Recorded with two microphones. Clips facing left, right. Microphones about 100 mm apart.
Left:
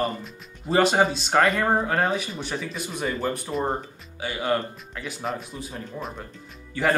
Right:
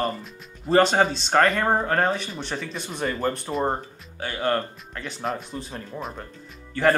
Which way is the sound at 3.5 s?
15° right (ahead or behind).